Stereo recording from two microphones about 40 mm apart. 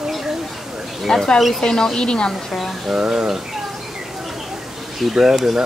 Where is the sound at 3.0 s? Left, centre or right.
Centre.